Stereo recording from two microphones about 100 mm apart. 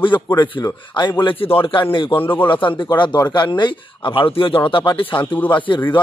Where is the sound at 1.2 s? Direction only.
65° left (ahead or behind).